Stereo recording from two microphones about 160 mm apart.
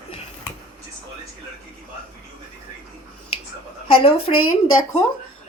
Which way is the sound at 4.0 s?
35° left (ahead or behind).